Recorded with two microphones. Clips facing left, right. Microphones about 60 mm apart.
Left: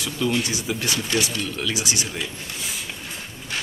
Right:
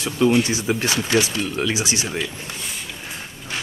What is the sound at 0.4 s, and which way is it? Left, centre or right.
Speech, right.